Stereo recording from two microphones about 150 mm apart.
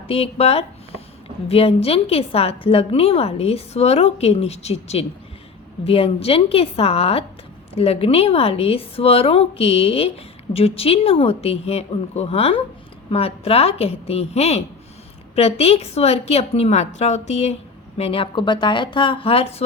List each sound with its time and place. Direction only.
0.1 s a woman's voice: 40° left (ahead or behind)